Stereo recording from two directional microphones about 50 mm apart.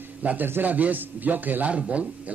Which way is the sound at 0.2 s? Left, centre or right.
Right.